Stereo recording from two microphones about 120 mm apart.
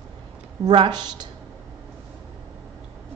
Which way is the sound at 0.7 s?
40° right (ahead or behind).